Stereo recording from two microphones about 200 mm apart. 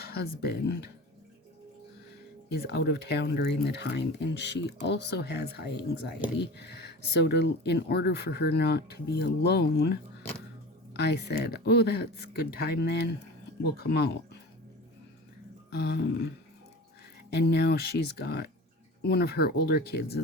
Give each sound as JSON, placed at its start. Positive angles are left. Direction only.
{"t": 0.1, "sound": "speech", "side_deg": 50}
{"t": 2.5, "sound": "speech", "side_deg": 55}
{"t": 7.2, "sound": "speech", "side_deg": 55}
{"t": 15.7, "sound": "speech", "side_deg": 55}
{"t": 17.3, "sound": "speech", "side_deg": 55}